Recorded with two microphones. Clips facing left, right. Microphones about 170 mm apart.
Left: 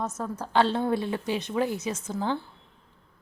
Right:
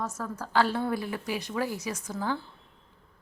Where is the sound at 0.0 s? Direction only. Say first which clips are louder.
Left 3 dB; 20° left (ahead or behind).